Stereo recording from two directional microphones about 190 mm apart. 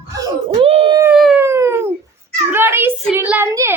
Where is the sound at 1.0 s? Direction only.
5° right (ahead or behind).